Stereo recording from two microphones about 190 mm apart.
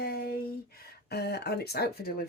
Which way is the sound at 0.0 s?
55° left (ahead or behind).